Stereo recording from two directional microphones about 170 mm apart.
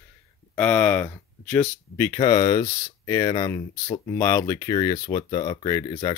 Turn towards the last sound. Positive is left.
turn(degrees=30)  # may be behind; listen again after turning